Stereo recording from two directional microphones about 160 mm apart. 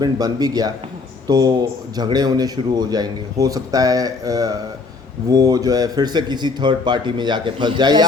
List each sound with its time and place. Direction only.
0.0 s a man's voice: 25° right (ahead or behind)